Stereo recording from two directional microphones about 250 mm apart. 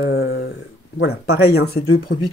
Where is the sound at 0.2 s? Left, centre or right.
Left.